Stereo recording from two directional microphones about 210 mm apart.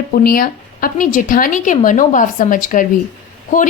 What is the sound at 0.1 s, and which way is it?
Speech, 45° left (ahead or behind).